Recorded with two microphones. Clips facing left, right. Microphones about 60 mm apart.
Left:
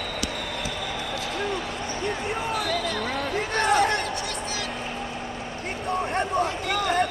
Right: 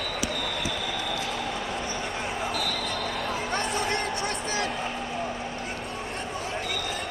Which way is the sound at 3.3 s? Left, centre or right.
Left.